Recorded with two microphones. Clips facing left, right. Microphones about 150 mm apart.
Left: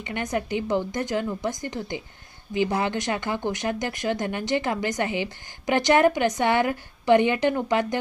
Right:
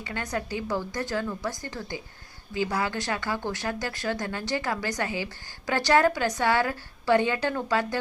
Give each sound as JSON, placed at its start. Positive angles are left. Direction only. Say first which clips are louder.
{"t": 0.0, "sound": "speech", "louder": "left 4 dB", "side_deg": 20}